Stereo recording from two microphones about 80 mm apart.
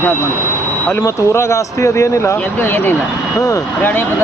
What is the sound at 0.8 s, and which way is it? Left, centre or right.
Speech, left.